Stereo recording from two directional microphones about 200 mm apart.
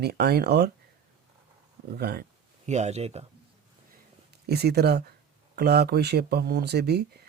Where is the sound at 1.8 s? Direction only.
50° right (ahead or behind).